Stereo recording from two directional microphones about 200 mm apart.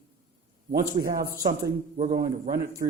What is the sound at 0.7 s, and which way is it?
A man's voice, 50° right (ahead or behind).